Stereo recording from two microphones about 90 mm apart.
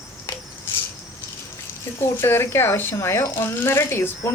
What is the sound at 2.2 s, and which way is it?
Speech, 25° left (ahead or behind).